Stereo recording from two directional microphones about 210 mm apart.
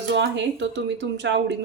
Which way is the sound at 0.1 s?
55° right (ahead or behind).